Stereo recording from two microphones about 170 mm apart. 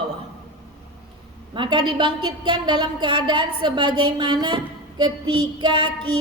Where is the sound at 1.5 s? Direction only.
25° right (ahead or behind).